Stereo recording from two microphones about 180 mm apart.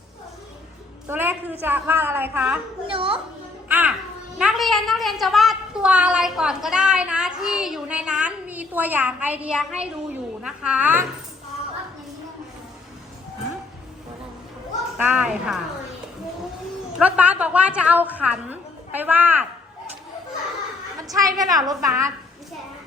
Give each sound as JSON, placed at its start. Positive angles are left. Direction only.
{"t": 1.0, "sound": "a sound", "side_deg": -10}
{"t": 1.6, "sound": "a woman's voice", "side_deg": -10}
{"t": 2.8, "sound": "a woman's voice", "side_deg": -30}
{"t": 3.7, "sound": "a child's voice", "side_deg": -10}
{"t": 14.9, "sound": "a woman's voice", "side_deg": -10}
{"t": 17.0, "sound": "a woman's voice", "side_deg": -10}
{"t": 21.1, "sound": "a woman's voice", "side_deg": -20}